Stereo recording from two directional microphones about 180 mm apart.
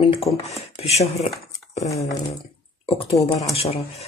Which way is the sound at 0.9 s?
35° left (ahead or behind).